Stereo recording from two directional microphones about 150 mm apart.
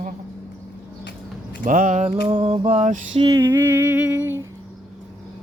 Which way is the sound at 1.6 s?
60° right (ahead or behind).